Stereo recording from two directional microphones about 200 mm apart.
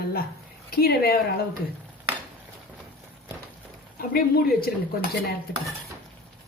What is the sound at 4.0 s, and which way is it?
Speech, 45° left (ahead or behind).